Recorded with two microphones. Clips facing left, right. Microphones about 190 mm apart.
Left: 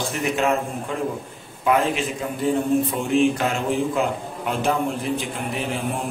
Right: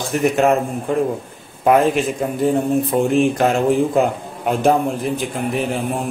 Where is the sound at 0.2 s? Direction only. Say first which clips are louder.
Right 7 dB; 45° right (ahead or behind).